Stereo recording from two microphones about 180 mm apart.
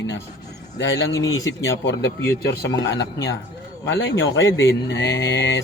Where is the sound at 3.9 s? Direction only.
90° left.